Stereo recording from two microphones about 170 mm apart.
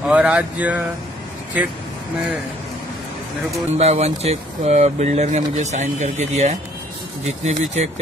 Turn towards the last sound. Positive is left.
turn(degrees=-40)  # may be behind; listen again after turning